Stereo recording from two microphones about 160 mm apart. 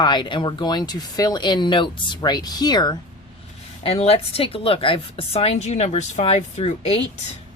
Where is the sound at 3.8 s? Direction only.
40° left (ahead or behind).